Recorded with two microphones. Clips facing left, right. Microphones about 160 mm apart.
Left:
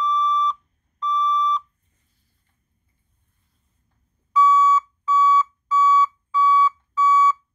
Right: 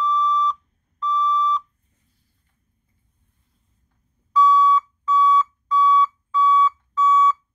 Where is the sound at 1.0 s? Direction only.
Centre (ahead or behind).